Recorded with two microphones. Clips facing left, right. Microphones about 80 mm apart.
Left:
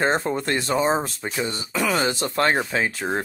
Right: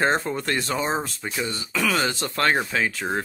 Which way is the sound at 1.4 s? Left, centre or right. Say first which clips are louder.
Left 1 dB; left.